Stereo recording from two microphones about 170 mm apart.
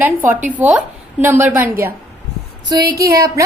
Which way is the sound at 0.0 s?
10° right (ahead or behind).